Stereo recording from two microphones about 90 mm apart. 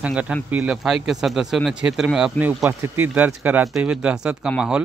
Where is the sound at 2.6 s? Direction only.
20° right (ahead or behind).